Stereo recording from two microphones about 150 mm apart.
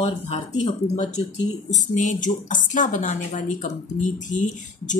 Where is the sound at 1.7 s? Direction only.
55° left (ahead or behind).